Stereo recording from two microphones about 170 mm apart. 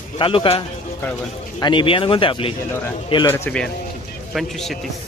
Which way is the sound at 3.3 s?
10° left (ahead or behind).